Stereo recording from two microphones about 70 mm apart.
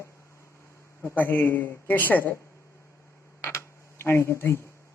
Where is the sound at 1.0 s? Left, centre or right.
Left.